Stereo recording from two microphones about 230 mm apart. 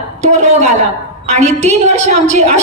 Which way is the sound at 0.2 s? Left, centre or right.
Right.